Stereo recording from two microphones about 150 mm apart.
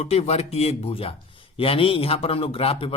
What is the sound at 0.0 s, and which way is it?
A man's voice, 45° left (ahead or behind).